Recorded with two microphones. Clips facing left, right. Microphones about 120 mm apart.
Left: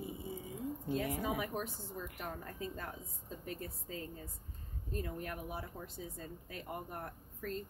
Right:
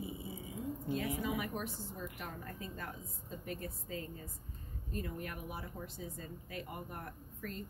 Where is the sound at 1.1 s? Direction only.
45° left (ahead or behind).